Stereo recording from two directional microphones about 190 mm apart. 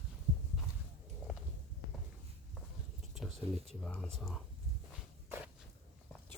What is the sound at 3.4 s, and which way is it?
Speech, 5° left (ahead or behind).